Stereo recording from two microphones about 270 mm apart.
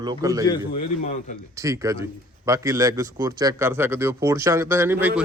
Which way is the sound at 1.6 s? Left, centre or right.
Centre.